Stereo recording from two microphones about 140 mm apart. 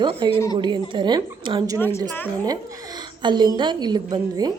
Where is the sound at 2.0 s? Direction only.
25° right (ahead or behind).